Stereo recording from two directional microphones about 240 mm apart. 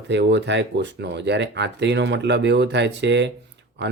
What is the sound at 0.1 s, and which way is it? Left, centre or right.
Speech, right.